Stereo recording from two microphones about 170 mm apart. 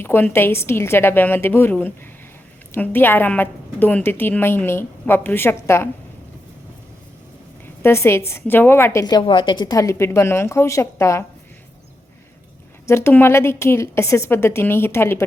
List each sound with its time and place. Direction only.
0.0 s a woman's voice: 15° left (ahead or behind)
7.8 s a woman's voice: 15° left (ahead or behind)
12.9 s a woman's voice: 15° left (ahead or behind)